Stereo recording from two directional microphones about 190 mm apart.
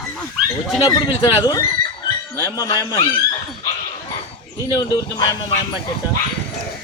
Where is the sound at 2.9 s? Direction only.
25° left (ahead or behind).